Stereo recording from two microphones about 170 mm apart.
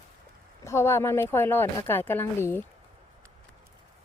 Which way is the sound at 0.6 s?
15° left (ahead or behind).